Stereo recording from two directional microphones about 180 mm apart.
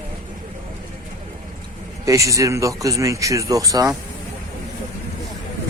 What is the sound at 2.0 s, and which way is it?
Speech, 20° right (ahead or behind).